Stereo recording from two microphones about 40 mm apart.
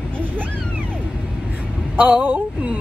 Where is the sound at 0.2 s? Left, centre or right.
Right.